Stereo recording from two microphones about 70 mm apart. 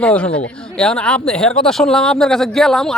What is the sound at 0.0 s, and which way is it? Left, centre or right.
Speech, centre.